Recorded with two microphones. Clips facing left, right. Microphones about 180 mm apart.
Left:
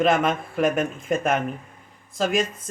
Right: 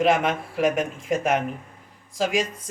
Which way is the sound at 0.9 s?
55° left (ahead or behind).